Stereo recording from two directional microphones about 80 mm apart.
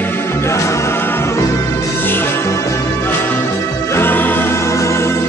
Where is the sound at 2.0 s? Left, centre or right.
Left.